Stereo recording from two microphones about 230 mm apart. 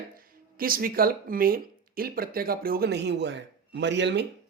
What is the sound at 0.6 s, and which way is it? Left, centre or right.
Speech, right.